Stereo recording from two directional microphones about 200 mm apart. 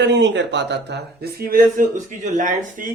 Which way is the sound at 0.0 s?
60° right (ahead or behind).